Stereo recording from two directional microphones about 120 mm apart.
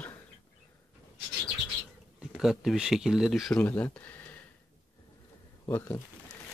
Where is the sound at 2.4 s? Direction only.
5° right (ahead or behind).